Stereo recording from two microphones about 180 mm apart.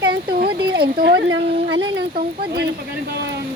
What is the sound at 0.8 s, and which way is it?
Speech, 60° right (ahead or behind).